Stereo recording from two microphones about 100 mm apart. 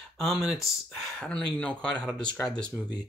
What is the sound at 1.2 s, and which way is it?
Speech, 10° left (ahead or behind).